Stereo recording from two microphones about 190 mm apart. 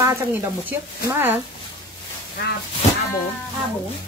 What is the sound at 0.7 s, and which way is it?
Speech, 10° right (ahead or behind).